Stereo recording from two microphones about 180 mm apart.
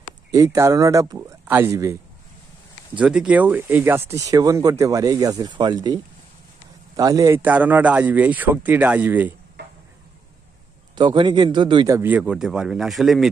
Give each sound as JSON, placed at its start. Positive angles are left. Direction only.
{"t": 0.3, "sound": "speech", "side_deg": -20}
{"t": 2.9, "sound": "speech", "side_deg": -5}
{"t": 7.0, "sound": "speech", "side_deg": -20}
{"t": 11.0, "sound": "speech", "side_deg": -25}
{"t": 12.0, "sound": "speech", "side_deg": -5}